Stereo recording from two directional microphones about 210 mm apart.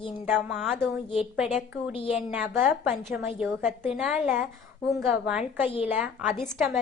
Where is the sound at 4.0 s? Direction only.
5° right (ahead or behind).